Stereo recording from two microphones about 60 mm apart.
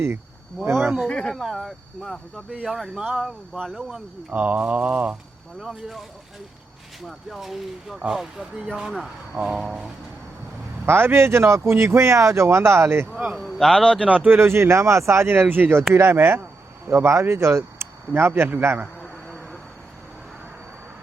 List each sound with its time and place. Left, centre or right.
0.6 s speech: right
1.0 s a man's voice: centre
1.4 s speech: centre
2.0 s a man's voice: centre
2.6 s speech: centre
4.3 s mantra: right
5.5 s speech: centre
7.1 s speech: centre
10.8 s speech: right
13.6 s a man's voice: centre
14.0 s mantra: right
14.3 s speech: right
16.9 s speech: right
19.0 s insect: left